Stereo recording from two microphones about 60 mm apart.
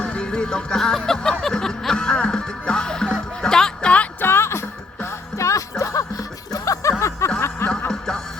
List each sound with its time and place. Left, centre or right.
0.0 s music: centre
4.2 s music: left
5.4 s music: left
7.3 s chuckle: left
7.9 s music: centre